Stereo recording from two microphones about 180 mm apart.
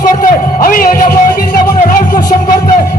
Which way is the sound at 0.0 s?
50° left (ahead or behind).